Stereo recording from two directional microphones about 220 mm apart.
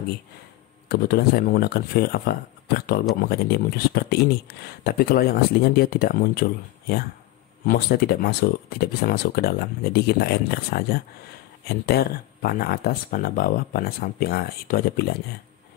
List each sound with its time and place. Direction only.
0.8 s speech: 45° left (ahead or behind)